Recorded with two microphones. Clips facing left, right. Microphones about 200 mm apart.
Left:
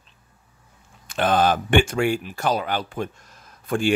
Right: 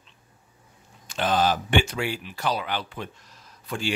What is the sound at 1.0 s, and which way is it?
Speech, 55° left (ahead or behind).